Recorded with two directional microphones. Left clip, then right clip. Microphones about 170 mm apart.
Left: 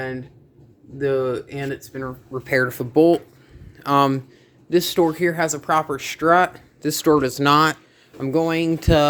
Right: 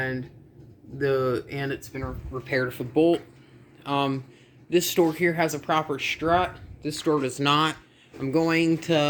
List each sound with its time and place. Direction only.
0.9 s speech: 5° left (ahead or behind)
2.3 s speech: 45° left (ahead or behind)
4.7 s speech: 20° left (ahead or behind)
6.2 s speech: 55° left (ahead or behind); by 7.8 s 30° left (ahead or behind)
8.3 s speech: 15° left (ahead or behind)
8.8 s speech: 35° left (ahead or behind)